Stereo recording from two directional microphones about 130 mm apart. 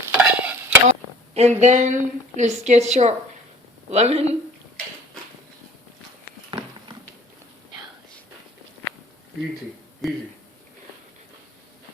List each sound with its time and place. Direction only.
0.1 s stir: 10° right (ahead or behind)
0.9 s speech: 60° right (ahead or behind)
6.5 s a sound: 40° right (ahead or behind)
10.0 s speech: centre (ahead or behind)